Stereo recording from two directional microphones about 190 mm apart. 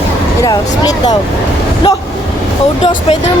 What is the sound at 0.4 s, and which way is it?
Speech, 20° left (ahead or behind).